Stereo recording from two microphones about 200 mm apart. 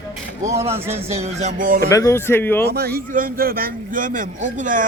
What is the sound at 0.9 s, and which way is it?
Music, 30° right (ahead or behind).